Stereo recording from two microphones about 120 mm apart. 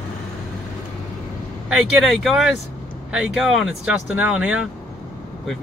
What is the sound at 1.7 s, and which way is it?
Speech, 5° right (ahead or behind).